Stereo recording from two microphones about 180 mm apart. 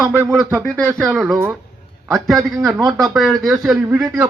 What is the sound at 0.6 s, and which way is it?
Speech, centre (ahead or behind).